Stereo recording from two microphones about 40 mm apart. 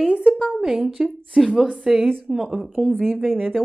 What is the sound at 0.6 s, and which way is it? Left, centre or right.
A woman's voice, centre.